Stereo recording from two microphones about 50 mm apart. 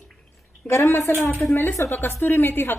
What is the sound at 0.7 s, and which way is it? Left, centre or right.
Speech, left.